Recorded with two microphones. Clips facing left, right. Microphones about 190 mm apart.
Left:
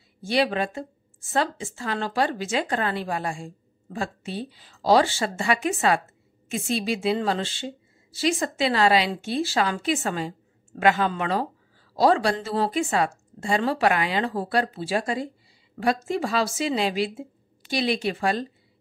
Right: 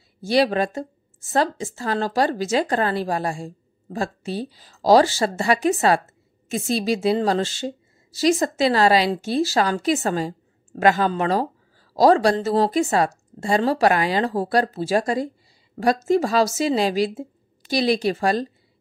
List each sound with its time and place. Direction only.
0.2 s speech: 40° right (ahead or behind)